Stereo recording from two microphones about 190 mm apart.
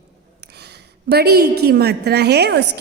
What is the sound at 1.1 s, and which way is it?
A woman's voice, 55° right (ahead or behind).